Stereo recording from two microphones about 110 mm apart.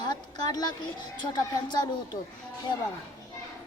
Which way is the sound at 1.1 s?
40° left (ahead or behind).